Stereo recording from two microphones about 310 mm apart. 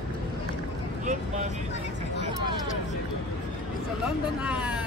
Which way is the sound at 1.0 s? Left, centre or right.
Right.